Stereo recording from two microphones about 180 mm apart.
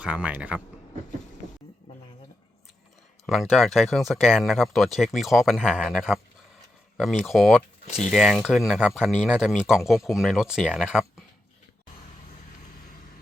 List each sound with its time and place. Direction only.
0.0 s speech: 5° right (ahead or behind)
3.2 s speech: centre (ahead or behind)
7.9 s speech: 35° left (ahead or behind)
8.1 s speech: 5° right (ahead or behind)